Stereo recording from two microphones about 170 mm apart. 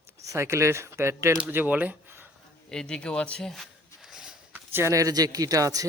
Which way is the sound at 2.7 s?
5° left (ahead or behind).